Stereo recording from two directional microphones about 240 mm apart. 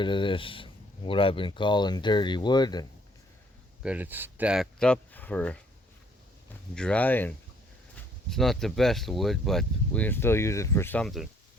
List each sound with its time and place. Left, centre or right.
0.0 s speech: left
3.8 s speech: centre
6.7 s speech: centre